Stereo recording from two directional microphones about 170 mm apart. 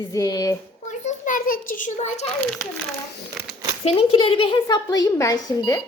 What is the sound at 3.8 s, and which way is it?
A woman's voice, 30° left (ahead or behind).